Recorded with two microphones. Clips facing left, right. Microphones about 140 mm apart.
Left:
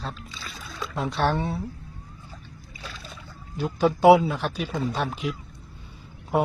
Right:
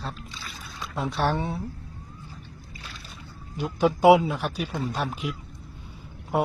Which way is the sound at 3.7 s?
15° right (ahead or behind).